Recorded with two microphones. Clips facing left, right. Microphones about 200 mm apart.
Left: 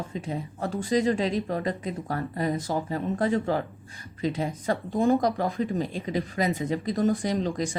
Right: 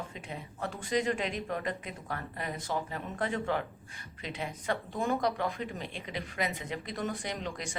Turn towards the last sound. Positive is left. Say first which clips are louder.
# left 10 dB
turn(degrees=35)  # may be behind; listen again after turning